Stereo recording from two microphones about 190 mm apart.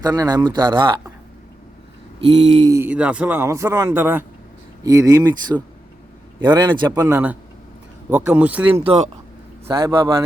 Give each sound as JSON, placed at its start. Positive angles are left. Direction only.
{"t": 0.0, "sound": "speech", "side_deg": -20}
{"t": 2.2, "sound": "speech", "side_deg": -30}
{"t": 8.1, "sound": "speech", "side_deg": -10}
{"t": 8.7, "sound": "speech", "side_deg": -30}
{"t": 9.7, "sound": "speech", "side_deg": -15}